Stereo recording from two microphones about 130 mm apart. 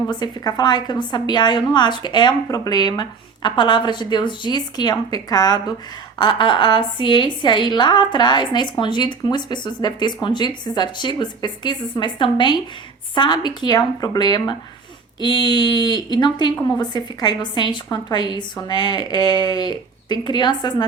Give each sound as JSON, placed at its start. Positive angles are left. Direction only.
{"t": 0.1, "sound": "a woman's voice", "side_deg": 30}